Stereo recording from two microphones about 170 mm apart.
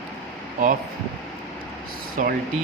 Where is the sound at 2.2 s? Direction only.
50° right (ahead or behind).